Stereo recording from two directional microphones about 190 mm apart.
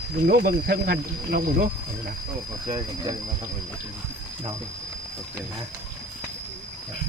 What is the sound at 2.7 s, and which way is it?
Speech, 25° right (ahead or behind).